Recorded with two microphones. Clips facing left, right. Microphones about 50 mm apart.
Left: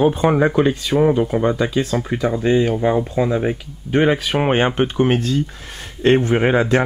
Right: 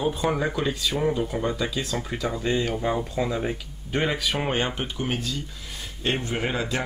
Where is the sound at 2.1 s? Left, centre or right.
Centre.